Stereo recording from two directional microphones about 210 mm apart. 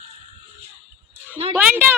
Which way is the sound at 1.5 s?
10° right (ahead or behind).